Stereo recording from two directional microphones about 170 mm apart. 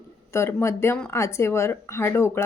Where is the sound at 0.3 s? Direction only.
15° left (ahead or behind).